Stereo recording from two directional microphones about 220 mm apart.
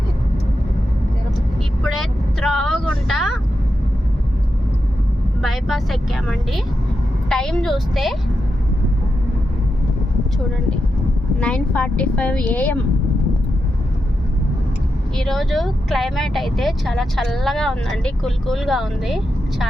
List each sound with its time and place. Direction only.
1.8 s vehicle: centre (ahead or behind)
5.4 s speech: centre (ahead or behind)
11.3 s speech: 5° left (ahead or behind)
15.1 s speech: centre (ahead or behind)